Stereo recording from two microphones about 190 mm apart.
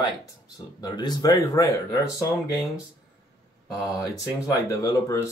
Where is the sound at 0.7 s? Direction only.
20° left (ahead or behind).